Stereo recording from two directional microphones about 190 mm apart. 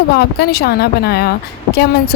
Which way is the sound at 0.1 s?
55° left (ahead or behind).